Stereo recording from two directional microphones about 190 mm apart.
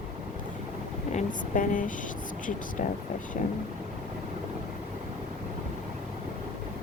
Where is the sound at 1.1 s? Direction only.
45° left (ahead or behind).